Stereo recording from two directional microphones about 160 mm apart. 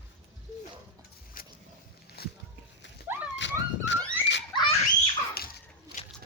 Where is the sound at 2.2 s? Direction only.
80° left.